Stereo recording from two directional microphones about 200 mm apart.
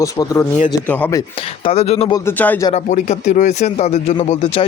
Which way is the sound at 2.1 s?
10° left (ahead or behind).